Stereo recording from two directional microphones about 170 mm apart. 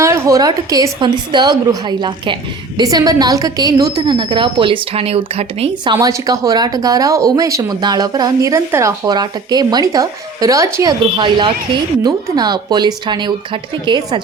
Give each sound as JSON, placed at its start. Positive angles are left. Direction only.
{"t": 0.0, "sound": "a woman's voice", "side_deg": -15}
{"t": 11.0, "sound": "a woman's voice", "side_deg": -30}